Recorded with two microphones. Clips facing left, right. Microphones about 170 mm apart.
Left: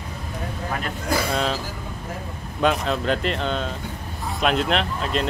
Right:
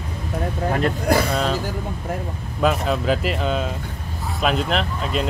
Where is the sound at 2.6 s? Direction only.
5° right (ahead or behind).